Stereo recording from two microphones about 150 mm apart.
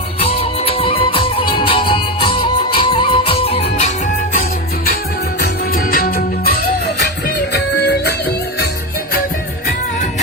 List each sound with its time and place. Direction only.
0.2 s music: 40° left (ahead or behind)
5.4 s music: 90° left